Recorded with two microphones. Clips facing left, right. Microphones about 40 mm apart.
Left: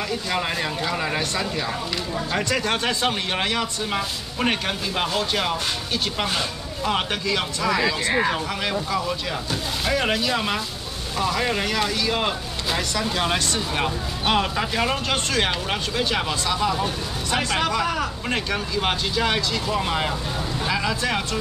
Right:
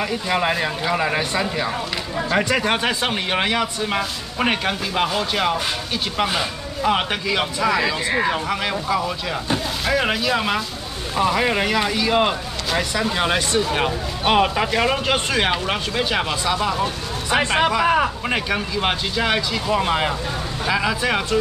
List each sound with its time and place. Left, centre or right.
0.0 s a man's voice: centre
17.3 s speech: right
18.3 s a man's voice: centre